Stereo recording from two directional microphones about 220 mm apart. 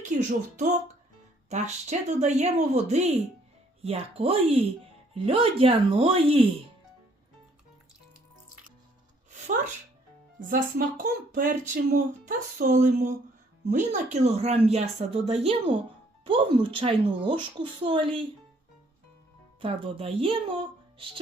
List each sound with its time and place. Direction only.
0.0 s a woman's voice: 35° right (ahead or behind)
10.5 s a woman's voice: 40° right (ahead or behind)
19.6 s a woman's voice: 25° right (ahead or behind)